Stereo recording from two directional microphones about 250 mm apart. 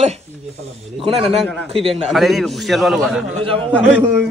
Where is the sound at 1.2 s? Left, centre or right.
Centre.